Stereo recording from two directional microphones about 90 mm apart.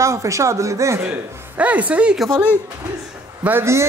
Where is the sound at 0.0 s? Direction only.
35° right (ahead or behind); by 2.1 s 15° right (ahead or behind).